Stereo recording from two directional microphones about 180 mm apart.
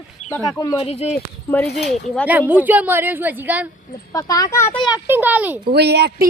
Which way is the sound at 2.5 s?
10° right (ahead or behind).